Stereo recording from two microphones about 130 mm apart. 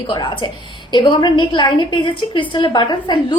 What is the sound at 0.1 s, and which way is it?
A woman's voice, 35° left (ahead or behind).